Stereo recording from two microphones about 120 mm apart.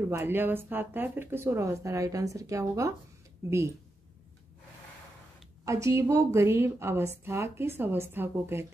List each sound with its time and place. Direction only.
0.1 s speech: 20° right (ahead or behind)
5.7 s speech: 25° right (ahead or behind)